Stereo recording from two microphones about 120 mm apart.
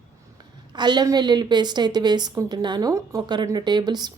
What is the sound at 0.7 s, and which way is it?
A woman's voice, 35° right (ahead or behind).